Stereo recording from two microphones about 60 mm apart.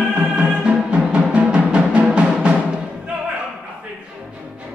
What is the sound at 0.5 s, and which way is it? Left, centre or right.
Music, centre.